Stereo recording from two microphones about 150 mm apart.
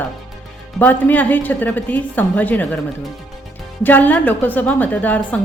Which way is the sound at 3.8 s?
10° left (ahead or behind).